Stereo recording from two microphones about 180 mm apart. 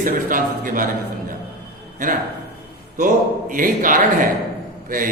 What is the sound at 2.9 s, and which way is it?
A man's voice, 50° right (ahead or behind).